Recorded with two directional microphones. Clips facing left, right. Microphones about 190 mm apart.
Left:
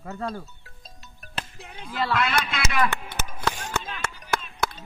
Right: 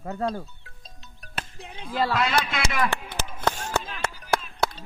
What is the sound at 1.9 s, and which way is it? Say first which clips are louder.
Speech: right 1 dB; 30° right (ahead or behind).